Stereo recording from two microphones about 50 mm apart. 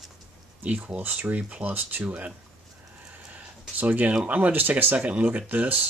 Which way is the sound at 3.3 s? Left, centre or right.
Right.